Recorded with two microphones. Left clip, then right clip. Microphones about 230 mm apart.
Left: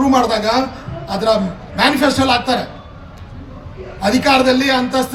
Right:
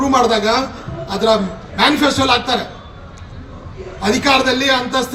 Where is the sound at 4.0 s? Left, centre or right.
Left.